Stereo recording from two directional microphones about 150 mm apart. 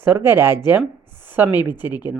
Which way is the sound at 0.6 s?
15° right (ahead or behind).